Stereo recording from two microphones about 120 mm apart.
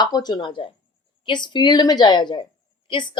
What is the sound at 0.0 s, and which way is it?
Speech, 35° left (ahead or behind).